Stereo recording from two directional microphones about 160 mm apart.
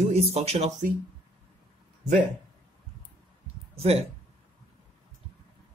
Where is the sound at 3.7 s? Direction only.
40° right (ahead or behind).